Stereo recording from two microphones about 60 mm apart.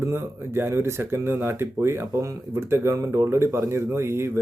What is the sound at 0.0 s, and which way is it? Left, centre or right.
Speech, right.